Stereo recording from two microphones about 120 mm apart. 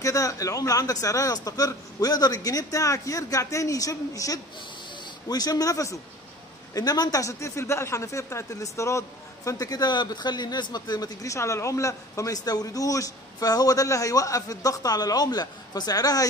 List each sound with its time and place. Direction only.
0.0 s speech: 30° left (ahead or behind)